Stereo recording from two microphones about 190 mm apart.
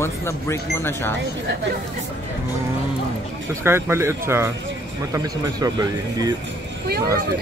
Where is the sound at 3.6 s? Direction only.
10° right (ahead or behind).